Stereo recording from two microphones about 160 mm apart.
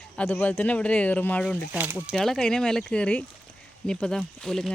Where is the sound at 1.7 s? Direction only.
10° right (ahead or behind).